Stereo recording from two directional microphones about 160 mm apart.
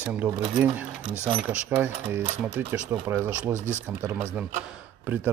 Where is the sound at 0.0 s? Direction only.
10° right (ahead or behind).